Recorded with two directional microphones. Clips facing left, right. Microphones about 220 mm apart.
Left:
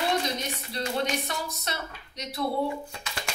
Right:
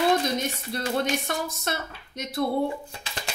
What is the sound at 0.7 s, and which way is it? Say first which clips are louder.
A woman's voice: right 2 dB; 50° right (ahead or behind).